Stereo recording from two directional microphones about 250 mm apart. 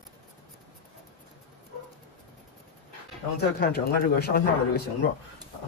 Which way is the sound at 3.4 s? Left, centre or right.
Left.